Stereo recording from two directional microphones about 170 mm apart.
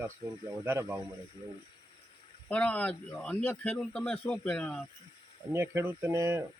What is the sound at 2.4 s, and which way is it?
Speech, 10° left (ahead or behind).